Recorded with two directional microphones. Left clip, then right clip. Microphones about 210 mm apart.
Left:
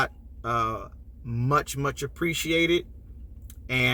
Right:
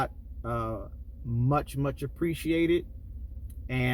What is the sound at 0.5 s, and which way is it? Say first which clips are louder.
Speech: left 7 dB; 15° left (ahead or behind).